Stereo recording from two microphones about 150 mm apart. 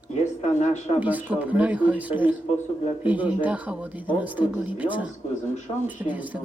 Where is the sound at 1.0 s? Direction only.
10° right (ahead or behind).